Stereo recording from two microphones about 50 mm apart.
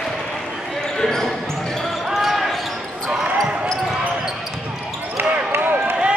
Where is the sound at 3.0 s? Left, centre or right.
Centre.